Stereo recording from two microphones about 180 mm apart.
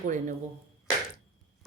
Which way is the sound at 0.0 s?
45° right (ahead or behind).